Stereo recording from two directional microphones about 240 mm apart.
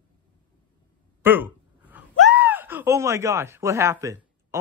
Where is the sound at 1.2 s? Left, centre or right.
Centre.